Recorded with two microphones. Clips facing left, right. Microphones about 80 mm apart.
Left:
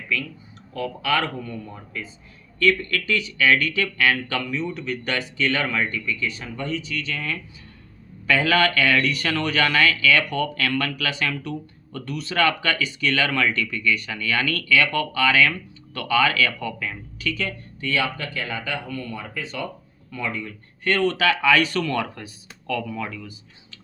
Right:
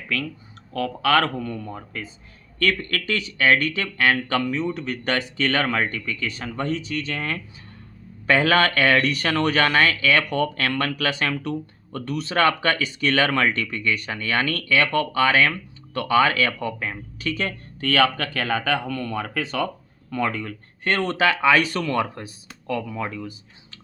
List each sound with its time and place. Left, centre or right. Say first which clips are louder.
0.7 s speech: right 4 dB; right
17.7 s speech: right 5 dB; right
20.1 s speech: right 4 dB; right
20.8 s speech: even; right